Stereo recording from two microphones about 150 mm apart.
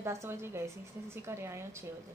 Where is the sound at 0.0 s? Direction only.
20° right (ahead or behind).